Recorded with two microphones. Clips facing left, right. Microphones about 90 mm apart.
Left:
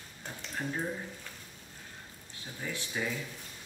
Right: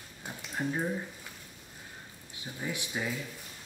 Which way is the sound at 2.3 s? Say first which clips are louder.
Right 2 dB; 15° right (ahead or behind).